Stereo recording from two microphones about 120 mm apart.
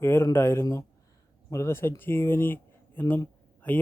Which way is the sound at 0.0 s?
20° left (ahead or behind).